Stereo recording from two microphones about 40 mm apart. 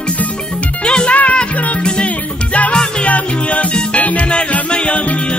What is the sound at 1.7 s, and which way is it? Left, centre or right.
Music, left.